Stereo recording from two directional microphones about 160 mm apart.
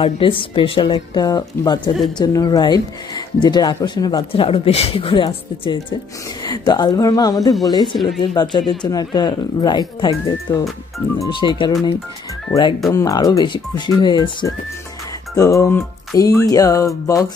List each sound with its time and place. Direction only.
0.0 s a woman's voice: 35° left (ahead or behind)
12.9 s speech: 20° left (ahead or behind)